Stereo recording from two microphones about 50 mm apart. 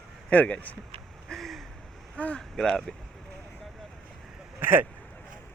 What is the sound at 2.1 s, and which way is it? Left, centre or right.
Speech, left.